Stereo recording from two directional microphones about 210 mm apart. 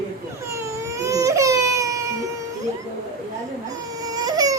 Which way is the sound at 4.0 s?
20° right (ahead or behind).